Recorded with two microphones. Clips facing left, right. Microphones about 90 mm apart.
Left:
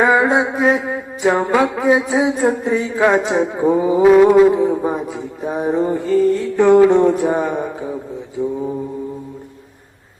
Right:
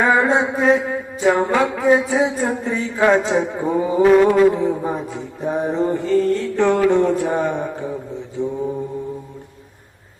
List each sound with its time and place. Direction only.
0.0 s mantra: 15° left (ahead or behind)